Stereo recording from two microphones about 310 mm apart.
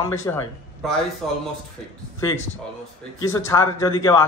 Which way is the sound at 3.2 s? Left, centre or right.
Centre.